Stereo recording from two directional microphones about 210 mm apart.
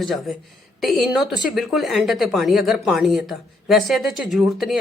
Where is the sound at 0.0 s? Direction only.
Centre (ahead or behind).